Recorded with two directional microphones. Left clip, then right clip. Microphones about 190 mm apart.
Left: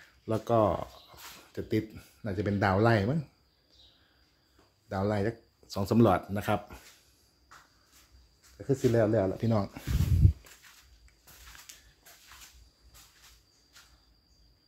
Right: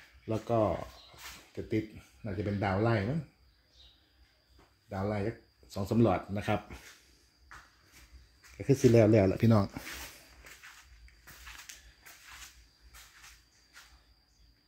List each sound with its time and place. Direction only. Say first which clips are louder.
0.3 s speech: left 4 dB; 15° left (ahead or behind)
4.8 s speech: left 4 dB; 25° left (ahead or behind); by 6.8 s 5° left (ahead or behind)
8.6 s speech: right 2 dB; 30° right (ahead or behind)
9.5 s speech: right 2 dB; 20° right (ahead or behind)